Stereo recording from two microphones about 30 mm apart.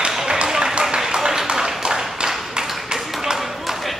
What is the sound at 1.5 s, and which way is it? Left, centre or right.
Tap, centre.